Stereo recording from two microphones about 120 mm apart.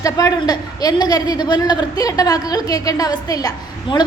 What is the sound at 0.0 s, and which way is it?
A woman's voice, 30° left (ahead or behind).